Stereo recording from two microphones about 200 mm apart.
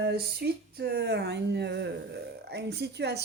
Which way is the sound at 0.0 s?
50° right (ahead or behind).